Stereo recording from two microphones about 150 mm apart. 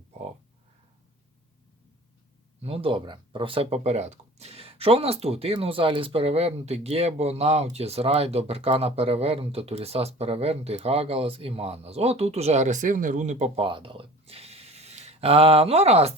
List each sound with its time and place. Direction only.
2.6 s speech: 40° right (ahead or behind)
13.7 s speech: 35° right (ahead or behind)